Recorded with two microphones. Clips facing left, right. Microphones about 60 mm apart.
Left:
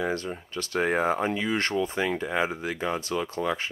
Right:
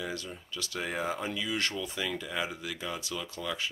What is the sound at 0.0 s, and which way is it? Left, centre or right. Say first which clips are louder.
Speech: left 9 dB; left.